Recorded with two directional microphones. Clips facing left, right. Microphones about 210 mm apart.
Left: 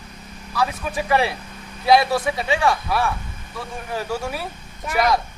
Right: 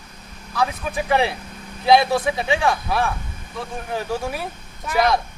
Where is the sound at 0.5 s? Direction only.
20° right (ahead or behind).